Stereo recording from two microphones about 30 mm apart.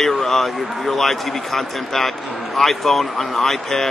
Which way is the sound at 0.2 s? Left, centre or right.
Centre.